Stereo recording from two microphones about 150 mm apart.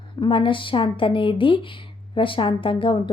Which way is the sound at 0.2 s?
35° left (ahead or behind).